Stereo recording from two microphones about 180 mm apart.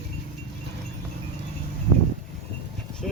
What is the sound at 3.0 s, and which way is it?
Speech, centre (ahead or behind).